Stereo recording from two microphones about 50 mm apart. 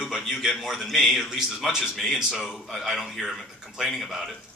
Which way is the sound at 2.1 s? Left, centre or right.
Centre.